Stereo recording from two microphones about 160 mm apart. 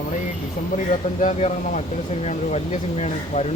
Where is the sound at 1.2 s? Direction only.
50° left (ahead or behind).